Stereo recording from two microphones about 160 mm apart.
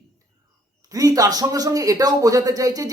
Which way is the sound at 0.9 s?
20° right (ahead or behind).